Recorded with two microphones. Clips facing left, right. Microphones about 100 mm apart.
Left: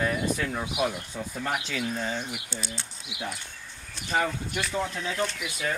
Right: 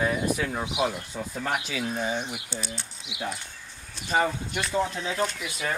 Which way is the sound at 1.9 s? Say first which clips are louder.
Right 2 dB; 15° right (ahead or behind).